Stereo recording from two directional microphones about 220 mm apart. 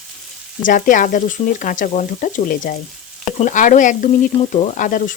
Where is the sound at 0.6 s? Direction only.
35° left (ahead or behind).